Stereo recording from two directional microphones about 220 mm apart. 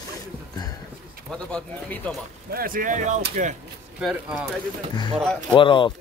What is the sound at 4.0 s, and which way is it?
Speech, 5° right (ahead or behind).